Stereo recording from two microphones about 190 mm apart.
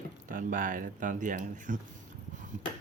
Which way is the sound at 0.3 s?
45° right (ahead or behind).